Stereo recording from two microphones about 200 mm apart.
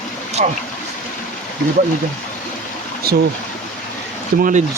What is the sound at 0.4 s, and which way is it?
Speech, 40° right (ahead or behind).